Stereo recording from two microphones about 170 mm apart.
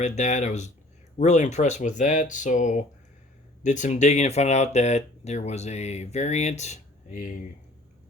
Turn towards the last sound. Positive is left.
turn(degrees=50)  # may be behind; listen again after turning